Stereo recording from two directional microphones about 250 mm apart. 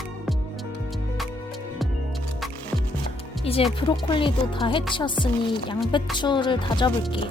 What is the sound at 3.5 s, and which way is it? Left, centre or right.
Music, left.